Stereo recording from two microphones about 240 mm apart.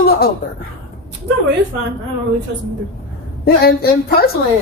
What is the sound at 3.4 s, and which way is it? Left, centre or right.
Speech, left.